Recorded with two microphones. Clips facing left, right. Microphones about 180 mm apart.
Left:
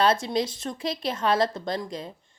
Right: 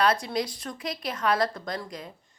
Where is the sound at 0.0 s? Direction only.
25° left (ahead or behind).